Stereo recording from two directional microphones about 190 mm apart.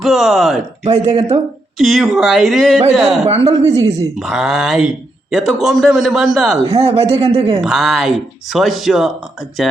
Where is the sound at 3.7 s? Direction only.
20° right (ahead or behind).